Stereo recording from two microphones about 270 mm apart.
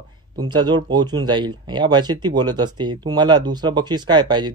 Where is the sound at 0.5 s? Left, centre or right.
Centre.